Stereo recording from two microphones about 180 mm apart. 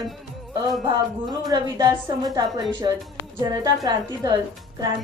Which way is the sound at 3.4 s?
20° right (ahead or behind).